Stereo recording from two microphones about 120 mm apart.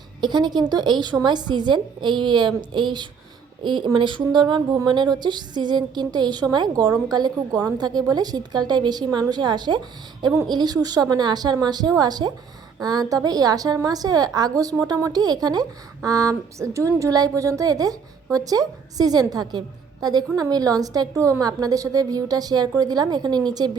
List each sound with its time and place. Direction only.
0.2 s speech: 40° right (ahead or behind)